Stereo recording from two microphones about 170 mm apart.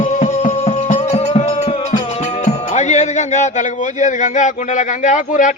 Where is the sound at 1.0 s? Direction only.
40° left (ahead or behind).